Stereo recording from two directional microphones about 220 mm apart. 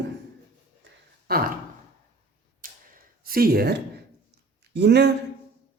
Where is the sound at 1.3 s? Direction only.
45° right (ahead or behind).